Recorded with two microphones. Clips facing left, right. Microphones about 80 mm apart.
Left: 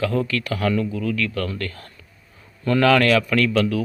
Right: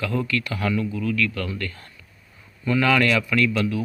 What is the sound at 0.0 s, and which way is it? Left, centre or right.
A man's voice, left.